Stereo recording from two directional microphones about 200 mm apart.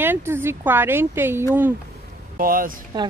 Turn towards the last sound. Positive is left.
turn(degrees=-20)  # may be behind; listen again after turning